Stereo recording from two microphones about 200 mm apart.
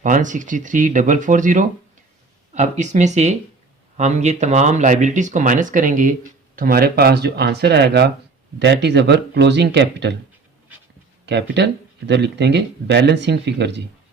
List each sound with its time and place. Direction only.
0.0 s speech: 40° right (ahead or behind); by 10.2 s 60° right (ahead or behind)
11.3 s speech: 60° right (ahead or behind)